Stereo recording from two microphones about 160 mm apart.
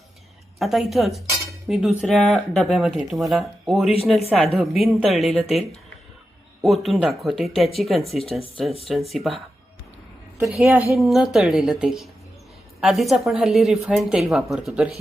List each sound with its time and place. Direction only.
0.6 s cutlery: centre (ahead or behind)
2.0 s a woman's voice: centre (ahead or behind)
10.4 s a woman's voice: 5° right (ahead or behind)